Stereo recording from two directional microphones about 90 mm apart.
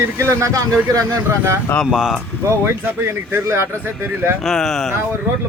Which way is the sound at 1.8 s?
5° right (ahead or behind).